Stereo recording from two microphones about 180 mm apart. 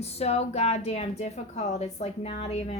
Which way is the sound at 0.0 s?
35° left (ahead or behind).